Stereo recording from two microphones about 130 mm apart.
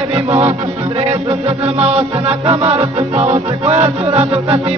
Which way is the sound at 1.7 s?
55° right (ahead or behind).